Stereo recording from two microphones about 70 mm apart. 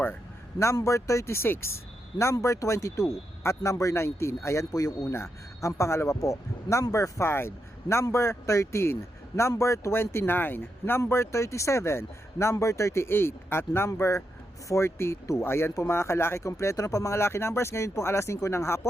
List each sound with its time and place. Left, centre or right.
0.6 s speech: left
4.8 s a man's voice: left
5.1 s speech: left
7.3 s speech: left